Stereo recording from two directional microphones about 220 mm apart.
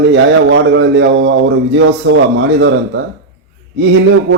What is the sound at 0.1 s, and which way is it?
A man's voice, 55° right (ahead or behind).